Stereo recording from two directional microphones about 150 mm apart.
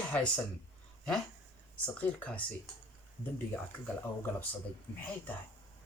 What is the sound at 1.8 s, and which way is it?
Speech, 10° left (ahead or behind).